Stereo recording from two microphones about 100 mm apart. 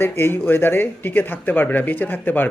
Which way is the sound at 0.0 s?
20° left (ahead or behind).